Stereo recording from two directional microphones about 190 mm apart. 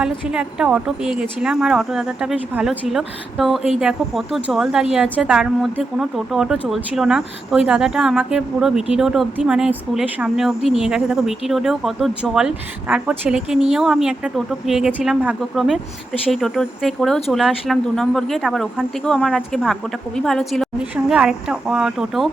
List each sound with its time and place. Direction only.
0.0 s a woman's voice: 5° right (ahead or behind)